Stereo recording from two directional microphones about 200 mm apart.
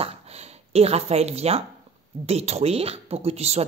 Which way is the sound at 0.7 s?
30° right (ahead or behind).